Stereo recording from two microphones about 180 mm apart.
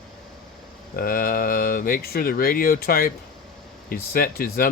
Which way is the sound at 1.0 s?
50° left (ahead or behind).